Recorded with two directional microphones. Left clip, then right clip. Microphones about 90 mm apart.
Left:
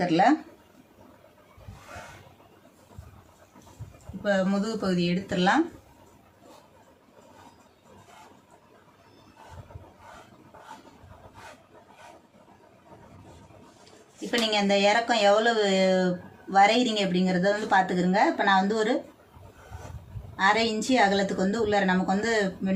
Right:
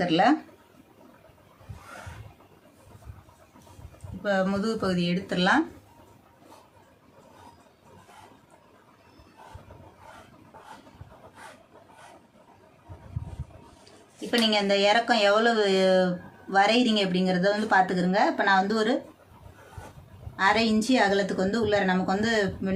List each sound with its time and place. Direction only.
0.0 s speech: 40° right (ahead or behind)
4.2 s speech: 30° right (ahead or behind)
14.2 s speech: 45° right (ahead or behind)
18.3 s speech: 70° right (ahead or behind)
20.3 s a woman's voice: 60° right (ahead or behind)